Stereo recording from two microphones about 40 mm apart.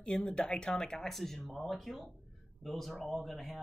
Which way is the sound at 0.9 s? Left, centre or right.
Centre.